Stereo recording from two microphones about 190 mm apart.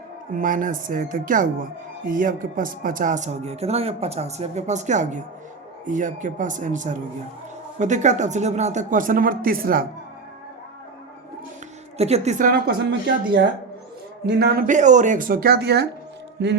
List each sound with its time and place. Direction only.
0.3 s speech: 45° right (ahead or behind)
11.9 s speech: 35° right (ahead or behind)
14.3 s speech: 55° right (ahead or behind)
16.4 s music: 65° right (ahead or behind)